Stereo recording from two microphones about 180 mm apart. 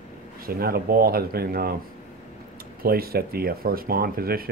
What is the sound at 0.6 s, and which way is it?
Speech, 55° right (ahead or behind).